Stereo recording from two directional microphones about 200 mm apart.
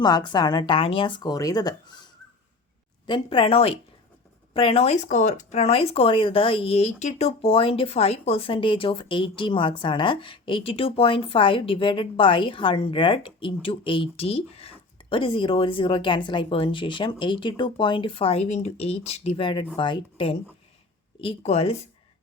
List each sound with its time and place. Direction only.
0.0 s speech: 20° left (ahead or behind)
3.1 s speech: 25° left (ahead or behind)